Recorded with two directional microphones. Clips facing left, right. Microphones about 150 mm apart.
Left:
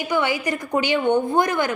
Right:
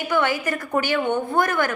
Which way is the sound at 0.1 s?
15° left (ahead or behind).